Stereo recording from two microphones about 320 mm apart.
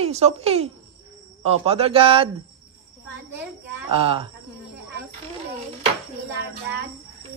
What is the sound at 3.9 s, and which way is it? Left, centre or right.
Speech, centre.